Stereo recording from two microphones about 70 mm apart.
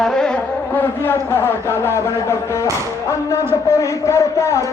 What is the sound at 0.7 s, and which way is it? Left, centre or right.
Speech, left.